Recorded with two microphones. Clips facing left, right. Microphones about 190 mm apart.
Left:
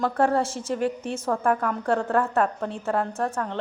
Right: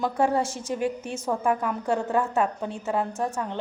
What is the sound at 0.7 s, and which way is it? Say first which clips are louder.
A woman's voice: left 2 dB; 10° right (ahead or behind).